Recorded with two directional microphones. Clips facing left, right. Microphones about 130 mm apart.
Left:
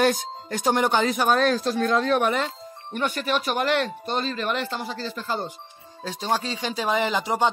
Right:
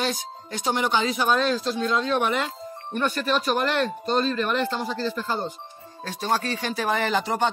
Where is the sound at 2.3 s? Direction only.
35° left (ahead or behind).